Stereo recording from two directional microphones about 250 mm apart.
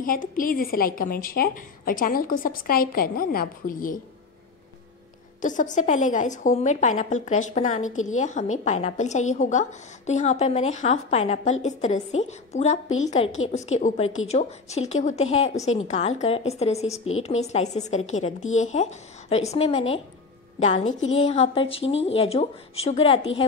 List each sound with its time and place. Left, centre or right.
0.0 s a woman's voice: left
5.4 s a woman's voice: left